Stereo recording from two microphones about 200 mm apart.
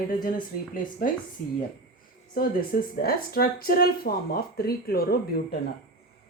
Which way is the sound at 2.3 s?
45° left (ahead or behind).